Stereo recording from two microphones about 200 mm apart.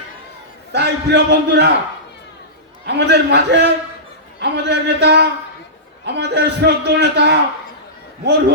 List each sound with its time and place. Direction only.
0.7 s a man's voice: 60° right (ahead or behind)
2.8 s a man's voice: 55° right (ahead or behind)